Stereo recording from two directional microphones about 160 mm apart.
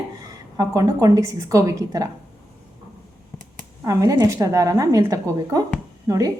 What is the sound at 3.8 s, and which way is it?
A woman's voice, 20° right (ahead or behind).